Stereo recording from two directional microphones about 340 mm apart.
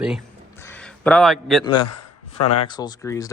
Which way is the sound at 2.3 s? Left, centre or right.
Centre.